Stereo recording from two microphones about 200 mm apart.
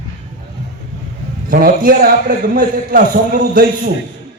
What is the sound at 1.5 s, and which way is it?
A man's voice, 45° right (ahead or behind).